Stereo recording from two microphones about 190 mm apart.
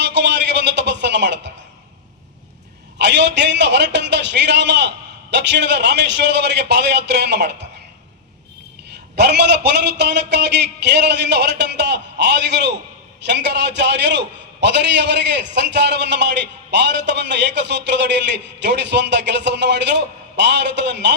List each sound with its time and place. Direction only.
0.0 s music: 65° right (ahead or behind)
3.0 s a man's voice: 65° right (ahead or behind)
8.9 s a man's voice: 60° right (ahead or behind)